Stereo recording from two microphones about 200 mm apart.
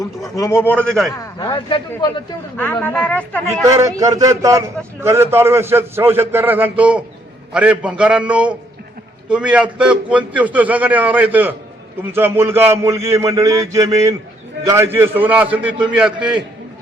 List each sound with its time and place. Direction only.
0.3 s a man's voice: 15° left (ahead or behind)
1.4 s speech: 25° left (ahead or behind)
2.8 s a man's voice: 5° left (ahead or behind)
3.5 s a man's voice: 15° right (ahead or behind)